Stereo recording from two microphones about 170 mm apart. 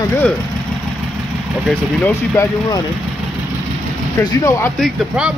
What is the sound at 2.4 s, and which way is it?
Speech, 15° left (ahead or behind).